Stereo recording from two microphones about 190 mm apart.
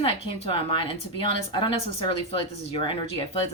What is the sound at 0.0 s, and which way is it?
A woman's voice, 30° left (ahead or behind).